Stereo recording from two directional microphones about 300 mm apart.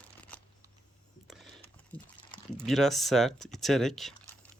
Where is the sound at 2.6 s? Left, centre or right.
Centre.